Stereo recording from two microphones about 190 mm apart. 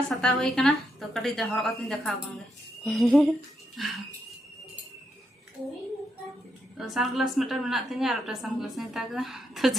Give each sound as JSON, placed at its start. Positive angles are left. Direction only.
{"t": 0.1, "sound": "a woman's voice", "side_deg": 5}
{"t": 6.7, "sound": "a woman's voice", "side_deg": 0}